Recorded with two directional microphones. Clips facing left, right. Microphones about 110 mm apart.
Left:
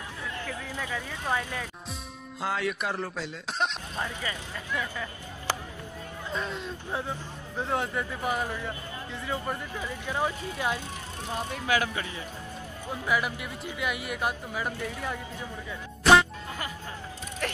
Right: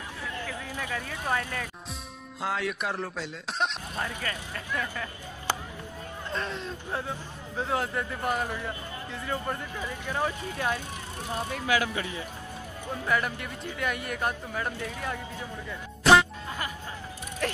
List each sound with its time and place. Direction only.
0.8 s a man's voice: 15° left (ahead or behind)
2.4 s speech: centre (ahead or behind)
4.0 s a man's voice: 15° left (ahead or behind)
6.3 s speech: 5° left (ahead or behind)
9.8 s a man's voice: 15° left (ahead or behind)
11.5 s speech: 35° left (ahead or behind)
13.0 s a man's voice: 10° left (ahead or behind)
16.0 s music: centre (ahead or behind)